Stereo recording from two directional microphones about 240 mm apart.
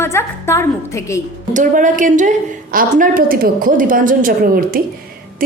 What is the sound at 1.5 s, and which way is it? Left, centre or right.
A woman's voice, right.